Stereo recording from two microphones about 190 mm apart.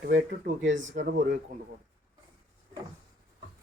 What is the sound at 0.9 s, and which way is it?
Speech, 45° right (ahead or behind).